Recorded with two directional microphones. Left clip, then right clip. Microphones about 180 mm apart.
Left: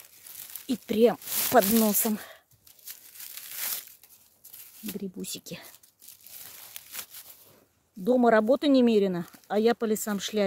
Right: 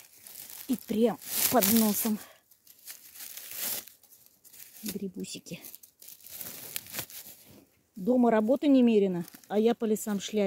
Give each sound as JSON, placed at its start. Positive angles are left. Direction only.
{"t": 0.7, "sound": "speech", "side_deg": 35}
{"t": 2.8, "sound": "crumpling", "side_deg": 5}
{"t": 5.2, "sound": "speech", "side_deg": 35}
{"t": 6.8, "sound": "a sound", "side_deg": -35}
{"t": 8.0, "sound": "speech", "side_deg": 35}